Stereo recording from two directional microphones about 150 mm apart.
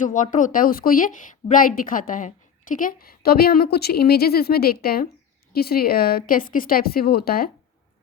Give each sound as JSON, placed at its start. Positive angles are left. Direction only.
{"t": 0.0, "sound": "a woman's voice", "side_deg": 60}